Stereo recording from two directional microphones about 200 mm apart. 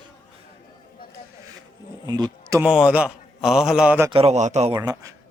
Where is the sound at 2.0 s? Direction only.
20° right (ahead or behind).